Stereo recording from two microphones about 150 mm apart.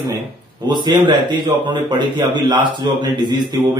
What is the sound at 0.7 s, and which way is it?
A man's voice, 30° right (ahead or behind).